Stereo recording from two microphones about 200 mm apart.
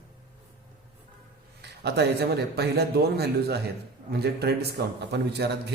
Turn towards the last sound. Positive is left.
turn(degrees=-55)  # may be behind; listen again after turning